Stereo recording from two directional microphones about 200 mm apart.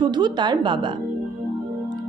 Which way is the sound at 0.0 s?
20° right (ahead or behind).